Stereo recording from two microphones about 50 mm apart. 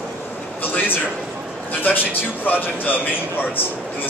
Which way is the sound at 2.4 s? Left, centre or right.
Left.